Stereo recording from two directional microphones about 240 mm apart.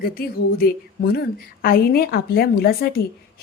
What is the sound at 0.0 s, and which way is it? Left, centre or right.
A woman's voice, left.